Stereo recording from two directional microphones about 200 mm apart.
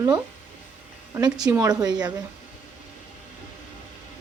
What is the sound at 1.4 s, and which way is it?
Speech, 15° right (ahead or behind).